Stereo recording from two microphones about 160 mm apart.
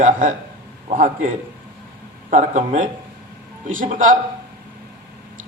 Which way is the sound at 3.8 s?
50° right (ahead or behind).